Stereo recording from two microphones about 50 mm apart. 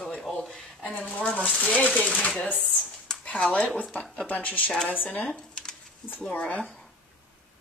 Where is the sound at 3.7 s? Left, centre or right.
Centre.